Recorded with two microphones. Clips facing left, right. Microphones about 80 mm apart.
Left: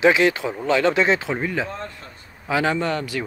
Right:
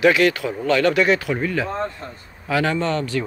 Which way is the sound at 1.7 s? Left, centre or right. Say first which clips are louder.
Right 7 dB; right.